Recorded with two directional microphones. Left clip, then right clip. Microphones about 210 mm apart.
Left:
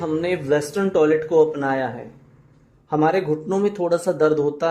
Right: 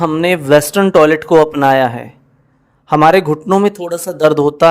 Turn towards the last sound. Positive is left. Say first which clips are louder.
# right 10 dB
turn(degrees=-40)  # may be behind; listen again after turning